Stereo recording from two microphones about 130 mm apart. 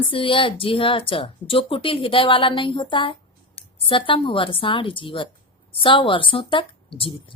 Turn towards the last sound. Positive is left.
turn(degrees=40)  # may be behind; listen again after turning